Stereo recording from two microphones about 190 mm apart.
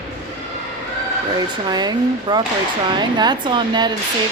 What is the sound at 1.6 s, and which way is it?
A woman's voice, 20° right (ahead or behind).